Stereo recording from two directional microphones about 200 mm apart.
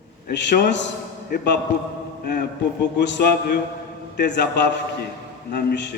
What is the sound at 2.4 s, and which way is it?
A man's voice, 60° left (ahead or behind).